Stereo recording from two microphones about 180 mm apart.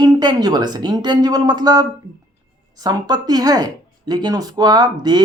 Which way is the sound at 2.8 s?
20° right (ahead or behind).